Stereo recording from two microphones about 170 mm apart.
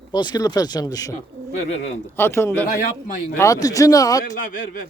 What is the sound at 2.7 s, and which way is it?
Speech, 50° left (ahead or behind).